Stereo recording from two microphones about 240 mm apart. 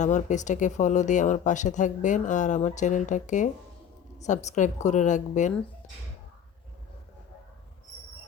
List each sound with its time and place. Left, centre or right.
0.0 s speech: left